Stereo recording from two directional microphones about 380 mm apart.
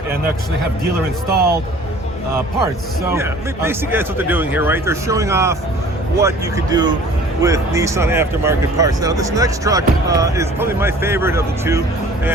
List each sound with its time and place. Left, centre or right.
1.3 s speech: right
3.1 s speech: centre